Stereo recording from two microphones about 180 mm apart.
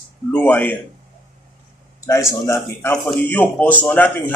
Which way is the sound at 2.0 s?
15° left (ahead or behind).